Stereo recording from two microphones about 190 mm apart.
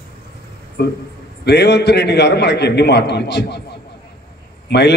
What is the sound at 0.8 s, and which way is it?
A man's voice, 55° left (ahead or behind).